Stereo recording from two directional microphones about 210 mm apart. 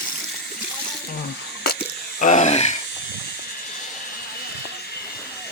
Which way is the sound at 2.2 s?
35° left (ahead or behind).